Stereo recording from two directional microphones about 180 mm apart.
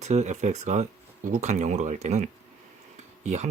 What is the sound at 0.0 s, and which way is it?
Speech, 40° right (ahead or behind).